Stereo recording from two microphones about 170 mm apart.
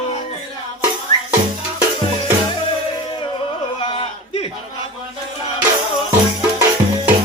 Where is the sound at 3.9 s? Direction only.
30° left (ahead or behind).